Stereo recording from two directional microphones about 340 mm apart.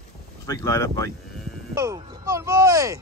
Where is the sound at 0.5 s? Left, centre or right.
Centre.